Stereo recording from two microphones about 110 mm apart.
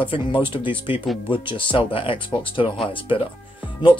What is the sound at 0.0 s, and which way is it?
Speech, 45° left (ahead or behind).